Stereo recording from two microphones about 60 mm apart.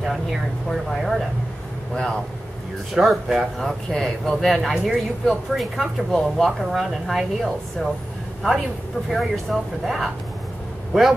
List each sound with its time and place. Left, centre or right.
0.0 s air conditioning: centre
0.7 s speech: centre
2.9 s speech: centre
9.1 s speech: centre